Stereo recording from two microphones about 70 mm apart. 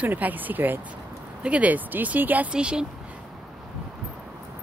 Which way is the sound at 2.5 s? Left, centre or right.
Centre.